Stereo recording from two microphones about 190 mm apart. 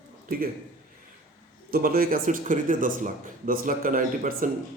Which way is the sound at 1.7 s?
50° right (ahead or behind).